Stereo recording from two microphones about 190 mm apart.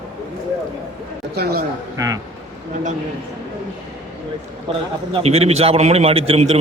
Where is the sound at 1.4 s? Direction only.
55° right (ahead or behind).